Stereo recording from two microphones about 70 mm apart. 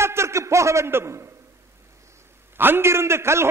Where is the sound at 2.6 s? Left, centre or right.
Right.